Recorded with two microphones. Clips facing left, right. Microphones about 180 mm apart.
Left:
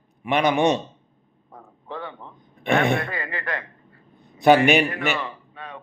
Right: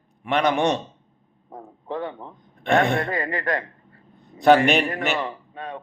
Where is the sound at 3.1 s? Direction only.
40° right (ahead or behind).